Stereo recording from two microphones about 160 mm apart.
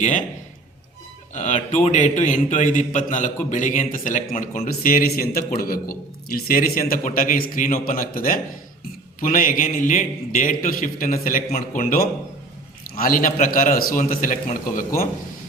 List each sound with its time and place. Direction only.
0.0 s a man's voice: 50° left (ahead or behind)
1.3 s a man's voice: 50° left (ahead or behind)